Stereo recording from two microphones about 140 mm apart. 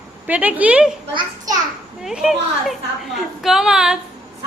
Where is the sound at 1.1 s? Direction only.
35° right (ahead or behind).